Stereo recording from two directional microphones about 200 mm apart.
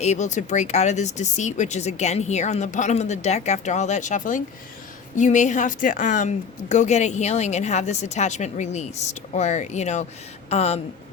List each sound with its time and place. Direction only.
0.0 s speech: 35° left (ahead or behind)